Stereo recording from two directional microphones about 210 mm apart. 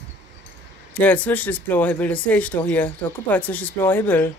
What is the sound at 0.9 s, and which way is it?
Speech, 10° left (ahead or behind).